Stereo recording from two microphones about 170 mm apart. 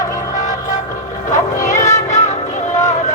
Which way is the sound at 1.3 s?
20° left (ahead or behind).